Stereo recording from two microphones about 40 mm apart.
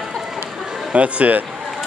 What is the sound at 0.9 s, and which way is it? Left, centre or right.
Speech, right.